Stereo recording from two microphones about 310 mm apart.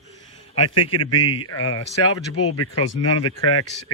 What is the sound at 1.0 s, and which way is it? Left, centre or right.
Speech, left.